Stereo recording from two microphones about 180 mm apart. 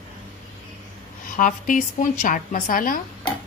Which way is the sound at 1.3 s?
45° left (ahead or behind).